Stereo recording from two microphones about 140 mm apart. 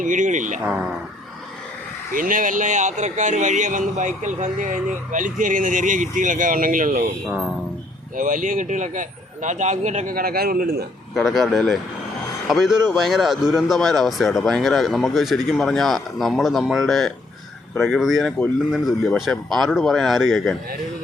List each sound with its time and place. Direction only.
0.0 s speech: 65° right (ahead or behind)
0.6 s speech: 5° right (ahead or behind)
2.1 s speech: 75° right (ahead or behind)
8.1 s speech: 70° right (ahead or behind); by 10.8 s 90° right
11.1 s speech: centre (ahead or behind)